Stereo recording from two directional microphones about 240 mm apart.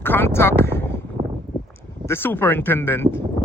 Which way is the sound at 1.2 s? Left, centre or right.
Right.